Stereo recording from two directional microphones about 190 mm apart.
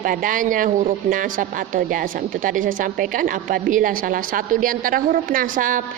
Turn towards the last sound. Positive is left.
turn(degrees=-45)  # may be behind; listen again after turning